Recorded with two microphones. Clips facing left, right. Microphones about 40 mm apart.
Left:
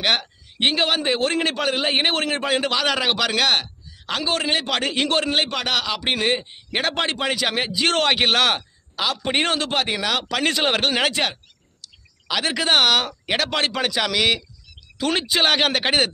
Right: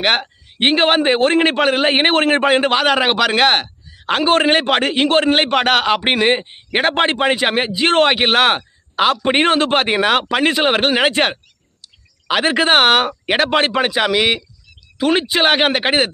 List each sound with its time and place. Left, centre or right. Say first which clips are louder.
0.0 s a man's voice: right 5 dB; right
8.9 s a man's voice: right 8 dB; right
11.8 s bird: even; right
13.1 s a man's voice: right 7 dB; right